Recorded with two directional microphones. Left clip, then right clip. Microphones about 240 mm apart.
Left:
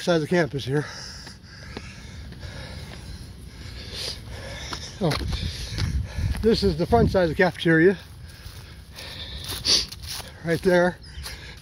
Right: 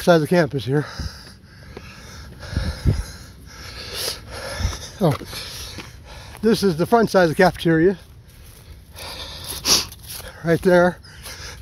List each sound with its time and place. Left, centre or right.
0.0 s speech: right
2.4 s a sound: right
3.5 s wheeze: right
5.3 s speech: right
5.9 s a sound: centre
6.4 s speech: right
7.7 s speech: centre
8.9 s a sound: right
10.4 s speech: right